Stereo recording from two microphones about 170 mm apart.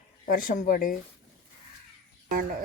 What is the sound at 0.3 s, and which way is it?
Speech, 55° left (ahead or behind).